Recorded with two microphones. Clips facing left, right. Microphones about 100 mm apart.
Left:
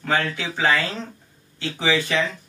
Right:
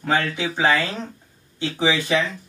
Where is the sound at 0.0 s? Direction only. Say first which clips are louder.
Right 2 dB; 20° right (ahead or behind).